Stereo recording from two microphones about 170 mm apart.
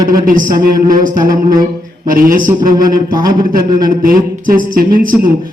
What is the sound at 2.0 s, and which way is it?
Speech, 55° right (ahead or behind).